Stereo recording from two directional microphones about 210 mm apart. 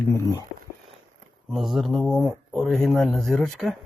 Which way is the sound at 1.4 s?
Centre (ahead or behind).